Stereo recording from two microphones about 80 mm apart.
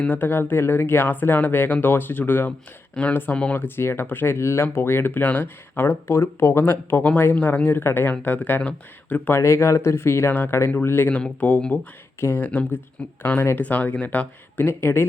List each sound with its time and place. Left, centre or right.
0.0 s speech: left
9.4 s speech: left
11.1 s speech: centre
12.2 s speech: left
12.5 s speech: left